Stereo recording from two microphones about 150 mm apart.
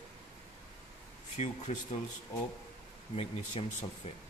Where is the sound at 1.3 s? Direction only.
50° left (ahead or behind).